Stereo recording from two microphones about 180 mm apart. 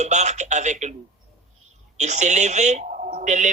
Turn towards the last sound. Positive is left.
turn(degrees=-40)  # may be behind; listen again after turning